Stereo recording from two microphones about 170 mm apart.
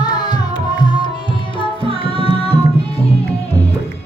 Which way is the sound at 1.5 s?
30° left (ahead or behind).